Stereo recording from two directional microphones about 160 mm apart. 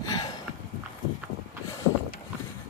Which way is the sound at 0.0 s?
25° left (ahead or behind).